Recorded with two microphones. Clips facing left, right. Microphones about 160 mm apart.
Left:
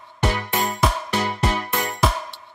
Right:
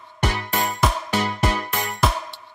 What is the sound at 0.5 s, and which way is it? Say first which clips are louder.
Music: even; centre (ahead or behind).